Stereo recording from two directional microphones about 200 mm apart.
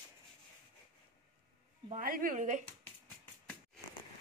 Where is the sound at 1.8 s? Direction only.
45° right (ahead or behind).